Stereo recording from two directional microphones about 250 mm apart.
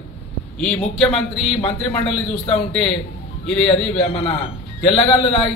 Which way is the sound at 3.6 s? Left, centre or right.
Left.